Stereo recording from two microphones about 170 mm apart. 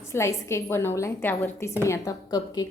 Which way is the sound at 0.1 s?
15° left (ahead or behind).